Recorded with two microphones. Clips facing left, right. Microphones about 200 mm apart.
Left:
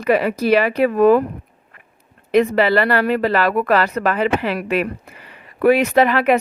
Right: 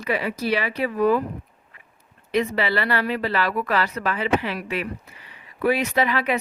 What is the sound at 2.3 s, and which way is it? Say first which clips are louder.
A woman's voice: left 8 dB; 50° left (ahead or behind).